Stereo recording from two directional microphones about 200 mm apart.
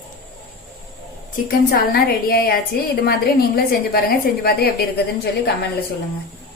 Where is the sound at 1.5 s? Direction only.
50° left (ahead or behind).